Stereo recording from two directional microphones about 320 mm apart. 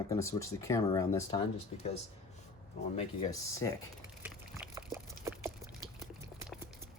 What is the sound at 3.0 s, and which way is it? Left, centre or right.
Speech, centre.